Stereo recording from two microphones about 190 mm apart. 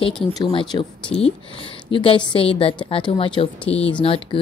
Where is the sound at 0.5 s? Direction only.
25° left (ahead or behind).